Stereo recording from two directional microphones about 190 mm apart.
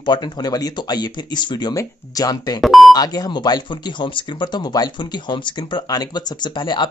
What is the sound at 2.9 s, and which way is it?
Speech, 20° left (ahead or behind).